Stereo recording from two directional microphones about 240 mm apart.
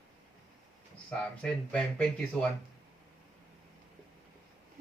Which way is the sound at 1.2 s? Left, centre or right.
Centre.